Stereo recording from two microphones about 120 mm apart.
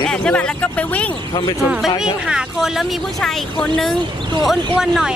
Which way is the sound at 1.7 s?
5° right (ahead or behind).